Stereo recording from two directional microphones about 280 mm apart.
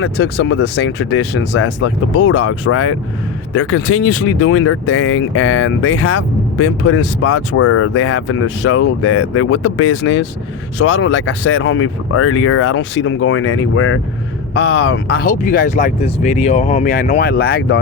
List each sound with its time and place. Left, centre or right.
0.0 s speech: left